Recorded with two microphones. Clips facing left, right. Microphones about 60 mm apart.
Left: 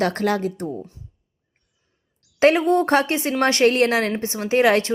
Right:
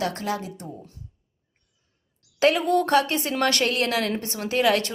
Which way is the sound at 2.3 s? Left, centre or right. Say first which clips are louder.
Left 4 dB; left.